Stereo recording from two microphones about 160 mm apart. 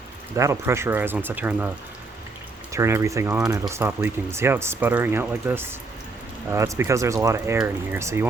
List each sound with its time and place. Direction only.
0.3 s speech: 20° right (ahead or behind)
2.7 s speech: 20° right (ahead or behind)